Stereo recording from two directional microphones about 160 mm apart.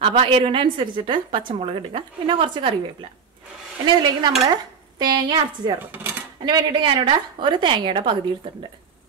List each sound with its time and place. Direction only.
0.0 s a woman's voice: 35° right (ahead or behind)
3.8 s dishes: 25° right (ahead or behind)
6.4 s a woman's voice: 30° right (ahead or behind)